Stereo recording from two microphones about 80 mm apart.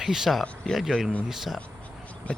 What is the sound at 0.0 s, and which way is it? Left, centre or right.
Speech, centre.